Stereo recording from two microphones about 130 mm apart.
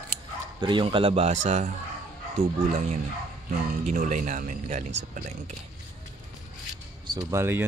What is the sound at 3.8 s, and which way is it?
A man's voice, 75° right (ahead or behind).